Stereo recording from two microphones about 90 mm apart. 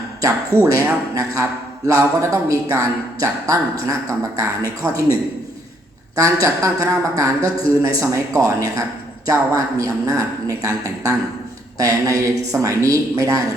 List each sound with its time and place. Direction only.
0.2 s a woman's voice: 35° right (ahead or behind)
6.1 s a woman's voice: 40° right (ahead or behind)